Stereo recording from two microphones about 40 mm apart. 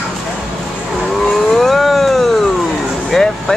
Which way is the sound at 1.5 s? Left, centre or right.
Centre.